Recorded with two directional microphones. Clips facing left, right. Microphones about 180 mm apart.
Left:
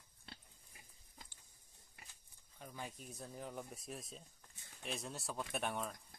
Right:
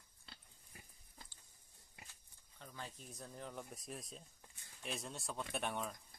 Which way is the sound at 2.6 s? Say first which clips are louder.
Left 2 dB; 15° left (ahead or behind).